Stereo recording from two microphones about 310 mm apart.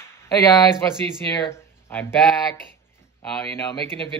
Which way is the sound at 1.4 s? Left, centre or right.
Centre.